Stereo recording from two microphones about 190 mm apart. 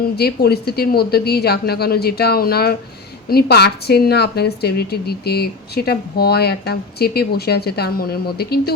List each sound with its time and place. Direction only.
0.2 s a woman's voice: 55° left (ahead or behind)